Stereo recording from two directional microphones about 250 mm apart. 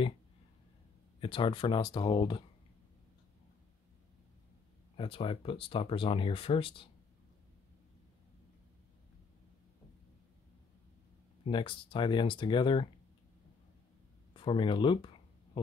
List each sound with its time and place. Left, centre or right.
1.2 s speech: left
4.9 s speech: left
11.4 s speech: centre
14.3 s speech: centre